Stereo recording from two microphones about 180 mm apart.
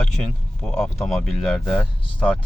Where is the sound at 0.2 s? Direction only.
5° left (ahead or behind).